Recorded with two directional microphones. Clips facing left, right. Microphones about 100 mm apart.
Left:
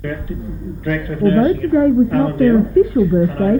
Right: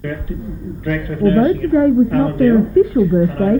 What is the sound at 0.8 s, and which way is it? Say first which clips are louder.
Speech: even; 20° left (ahead or behind).